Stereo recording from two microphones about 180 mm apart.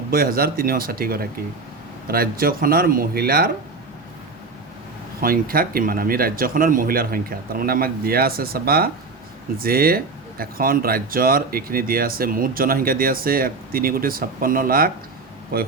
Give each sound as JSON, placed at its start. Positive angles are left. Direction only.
{"t": 0.1, "sound": "speech", "side_deg": -55}
{"t": 5.2, "sound": "speech", "side_deg": -55}